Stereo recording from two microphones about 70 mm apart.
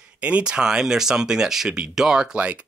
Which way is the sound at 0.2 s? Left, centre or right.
Centre.